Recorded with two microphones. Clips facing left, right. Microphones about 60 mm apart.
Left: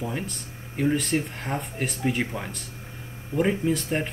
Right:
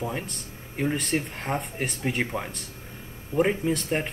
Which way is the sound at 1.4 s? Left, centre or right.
Centre.